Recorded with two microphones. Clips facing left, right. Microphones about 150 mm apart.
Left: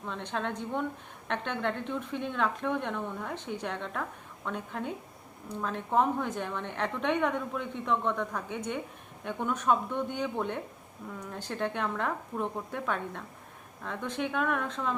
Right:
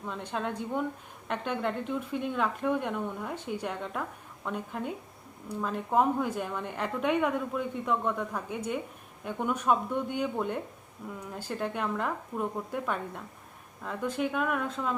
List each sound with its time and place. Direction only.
0.0 s a woman's voice: 5° right (ahead or behind)